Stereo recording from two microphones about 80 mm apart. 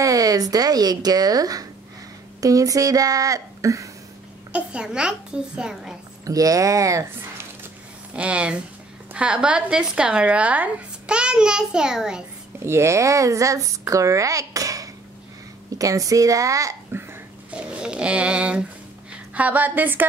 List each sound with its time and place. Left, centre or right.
0.0 s speech: right
4.5 s speech: centre
6.2 s speech: right
8.1 s speech: centre
12.5 s speech: right
17.5 s a woman's voice: centre